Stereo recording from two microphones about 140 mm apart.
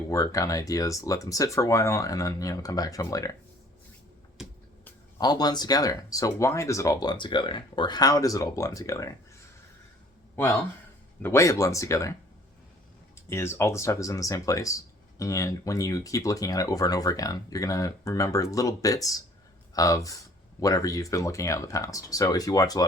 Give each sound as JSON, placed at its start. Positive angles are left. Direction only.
{"t": 0.1, "sound": "speech", "side_deg": 25}
{"t": 5.1, "sound": "speech", "side_deg": 30}
{"t": 11.2, "sound": "speech", "side_deg": 20}
{"t": 13.1, "sound": "speech", "side_deg": 15}